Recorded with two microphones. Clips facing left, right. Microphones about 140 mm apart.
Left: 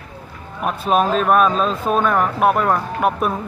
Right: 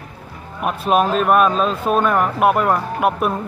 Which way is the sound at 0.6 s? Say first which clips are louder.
Right 1 dB; 5° right (ahead or behind).